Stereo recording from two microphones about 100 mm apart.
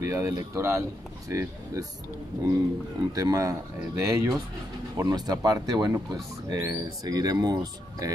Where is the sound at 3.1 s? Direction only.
35° right (ahead or behind).